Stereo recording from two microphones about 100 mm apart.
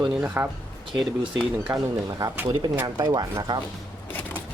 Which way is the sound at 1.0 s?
Centre (ahead or behind).